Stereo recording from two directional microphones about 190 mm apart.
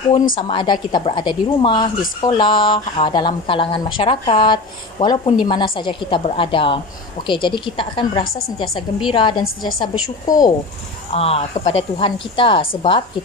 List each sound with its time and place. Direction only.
0.4 s a woman's voice: 25° left (ahead or behind)
11.1 s a woman's voice: 30° left (ahead or behind)